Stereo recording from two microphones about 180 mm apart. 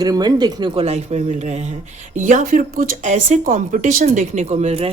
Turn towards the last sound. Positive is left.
turn(degrees=-35)  # may be behind; listen again after turning